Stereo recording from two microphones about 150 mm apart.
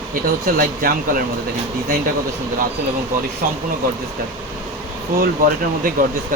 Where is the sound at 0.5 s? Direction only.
75° right (ahead or behind).